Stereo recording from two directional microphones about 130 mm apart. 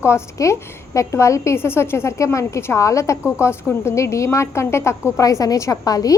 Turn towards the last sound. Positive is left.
turn(degrees=30)  # may be behind; listen again after turning